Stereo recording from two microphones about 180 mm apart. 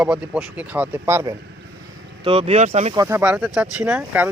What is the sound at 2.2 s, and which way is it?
Speech, 30° right (ahead or behind).